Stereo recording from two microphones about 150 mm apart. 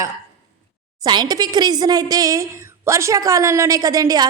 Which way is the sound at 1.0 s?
30° right (ahead or behind).